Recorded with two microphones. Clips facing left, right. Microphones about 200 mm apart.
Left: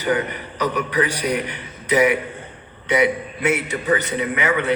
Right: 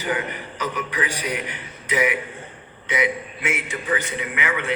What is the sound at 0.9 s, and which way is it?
A man's voice, 40° left (ahead or behind).